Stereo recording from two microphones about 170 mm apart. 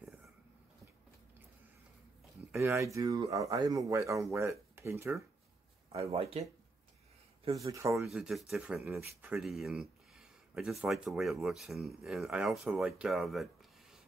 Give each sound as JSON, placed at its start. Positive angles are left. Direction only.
{"t": 2.5, "sound": "speech", "side_deg": -15}
{"t": 5.9, "sound": "speech", "side_deg": -35}
{"t": 7.5, "sound": "speech", "side_deg": -20}
{"t": 8.1, "sound": "speech", "side_deg": 0}
{"t": 8.9, "sound": "speech", "side_deg": -15}
{"t": 9.4, "sound": "speech", "side_deg": 0}